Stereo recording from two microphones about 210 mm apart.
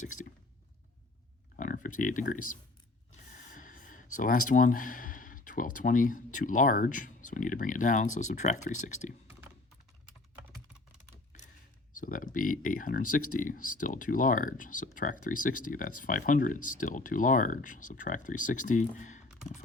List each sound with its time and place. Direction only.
1.5 s speech: 40° left (ahead or behind)
3.3 s a sound: 40° left (ahead or behind)
4.2 s speech: 40° left (ahead or behind)
11.9 s speech: 40° left (ahead or behind)